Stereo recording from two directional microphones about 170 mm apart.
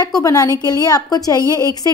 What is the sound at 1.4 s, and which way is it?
Speech, 20° right (ahead or behind).